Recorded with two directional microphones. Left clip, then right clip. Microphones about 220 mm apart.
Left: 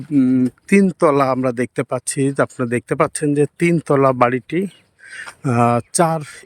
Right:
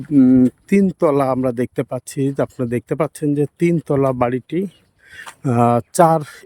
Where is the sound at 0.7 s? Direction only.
5° right (ahead or behind).